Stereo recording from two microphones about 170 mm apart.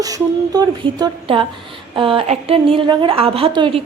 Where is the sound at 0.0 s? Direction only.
20° right (ahead or behind).